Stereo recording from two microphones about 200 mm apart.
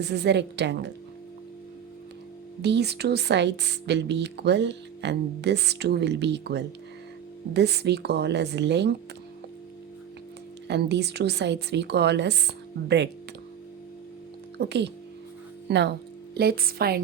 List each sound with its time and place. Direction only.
0.0 s speech: 55° right (ahead or behind)
2.6 s speech: 60° right (ahead or behind)
10.7 s speech: 60° right (ahead or behind)
14.6 s a woman's voice: 60° right (ahead or behind)